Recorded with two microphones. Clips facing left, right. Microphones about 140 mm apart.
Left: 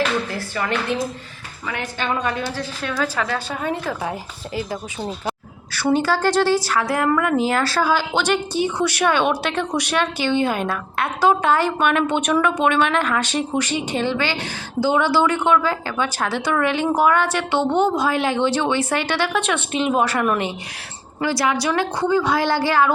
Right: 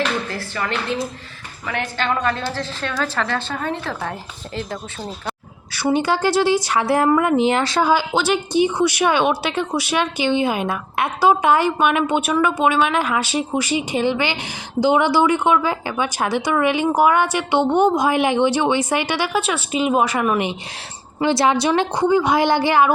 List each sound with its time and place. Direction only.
0.3 s a woman's voice: 15° left (ahead or behind)
1.7 s a woman's voice: 15° left (ahead or behind)
5.7 s speech: 15° right (ahead or behind)
21.2 s a woman's voice: 25° right (ahead or behind)